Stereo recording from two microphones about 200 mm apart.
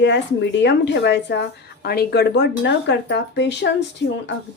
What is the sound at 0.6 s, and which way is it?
Speech, 60° left (ahead or behind).